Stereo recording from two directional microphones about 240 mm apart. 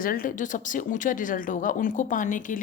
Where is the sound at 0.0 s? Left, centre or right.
Left.